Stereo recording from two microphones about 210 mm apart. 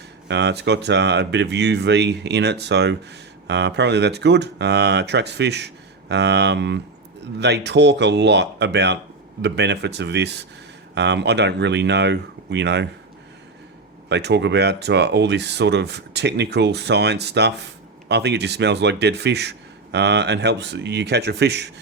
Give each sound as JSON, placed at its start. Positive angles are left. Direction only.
{"t": 0.3, "sound": "speech", "side_deg": -55}
{"t": 14.1, "sound": "speech", "side_deg": -55}